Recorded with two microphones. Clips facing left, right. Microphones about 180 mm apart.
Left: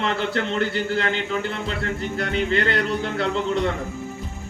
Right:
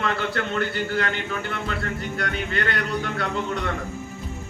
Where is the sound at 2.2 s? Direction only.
25° left (ahead or behind).